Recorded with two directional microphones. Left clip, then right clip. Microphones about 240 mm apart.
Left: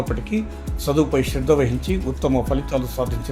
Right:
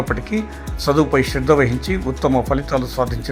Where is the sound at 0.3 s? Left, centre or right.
Right.